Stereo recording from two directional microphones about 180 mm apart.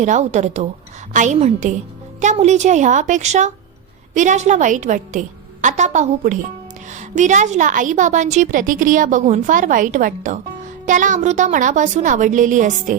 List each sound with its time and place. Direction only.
0.0 s a woman's voice: 40° right (ahead or behind)